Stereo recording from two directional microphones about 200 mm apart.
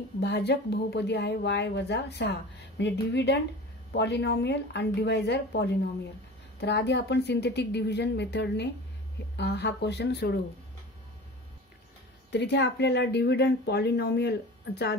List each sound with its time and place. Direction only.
0.2 s a woman's voice: 55° left (ahead or behind)
12.3 s a woman's voice: 60° left (ahead or behind)